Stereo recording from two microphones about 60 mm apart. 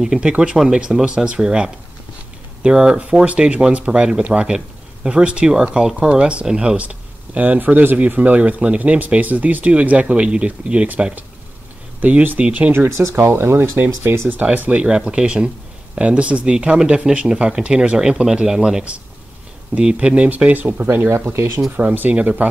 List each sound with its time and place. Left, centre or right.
0.0 s speech: centre
6.8 s speech: right
12.0 s speech: right
12.7 s speech: right
14.4 s speech: right
14.9 s speech: centre; by 21.2 s right
21.3 s speech: right
21.9 s speech: right